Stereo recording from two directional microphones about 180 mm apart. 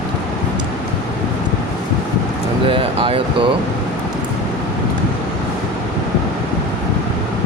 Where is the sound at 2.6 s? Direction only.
30° right (ahead or behind).